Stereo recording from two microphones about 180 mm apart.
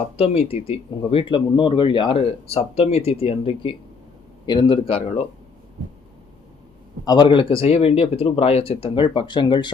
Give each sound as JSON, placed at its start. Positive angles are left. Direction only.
{"t": 0.2, "sound": "speech", "side_deg": 35}
{"t": 7.0, "sound": "speech", "side_deg": 25}